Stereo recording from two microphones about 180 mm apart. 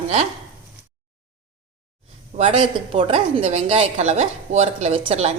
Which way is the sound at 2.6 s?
30° right (ahead or behind).